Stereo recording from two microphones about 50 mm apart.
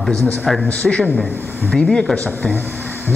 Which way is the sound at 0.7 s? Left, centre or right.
Left.